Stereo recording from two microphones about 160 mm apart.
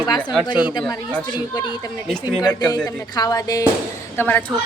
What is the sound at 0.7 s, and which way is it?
Speech, 25° left (ahead or behind).